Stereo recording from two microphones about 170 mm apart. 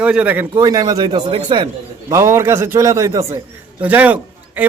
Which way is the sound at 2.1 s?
15° right (ahead or behind).